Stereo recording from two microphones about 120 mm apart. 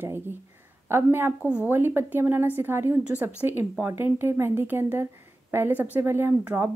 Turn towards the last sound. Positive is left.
turn(degrees=-20)  # may be behind; listen again after turning